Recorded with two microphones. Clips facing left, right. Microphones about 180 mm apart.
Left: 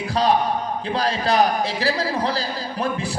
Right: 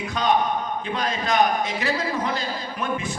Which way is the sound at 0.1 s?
35° left (ahead or behind).